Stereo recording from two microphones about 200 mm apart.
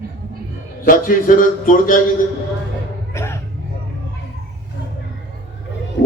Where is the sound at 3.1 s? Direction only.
15° left (ahead or behind).